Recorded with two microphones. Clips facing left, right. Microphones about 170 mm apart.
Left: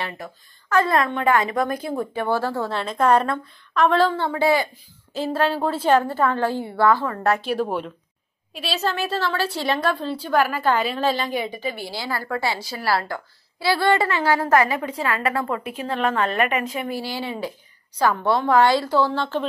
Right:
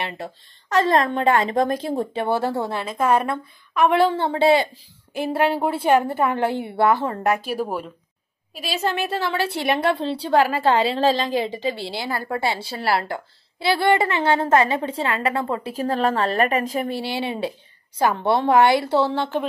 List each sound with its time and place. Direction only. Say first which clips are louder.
0.0 s a woman's voice: right 2 dB; 20° right (ahead or behind)
2.8 s a woman's voice: left 3 dB; 10° right (ahead or behind); by 4.6 s 25° right (ahead or behind)
5.1 s a woman's voice: right 1 dB; 15° right (ahead or behind)
7.3 s a woman's voice: left 2 dB; 10° right (ahead or behind)
8.8 s a woman's voice: right 1 dB; 20° right (ahead or behind)
10.0 s a woman's voice: right 2 dB; 75° right (ahead or behind)
10.3 s a woman's voice: right 2 dB; 25° right (ahead or behind)
17.2 s a woman's voice: right 3 dB; 25° right (ahead or behind)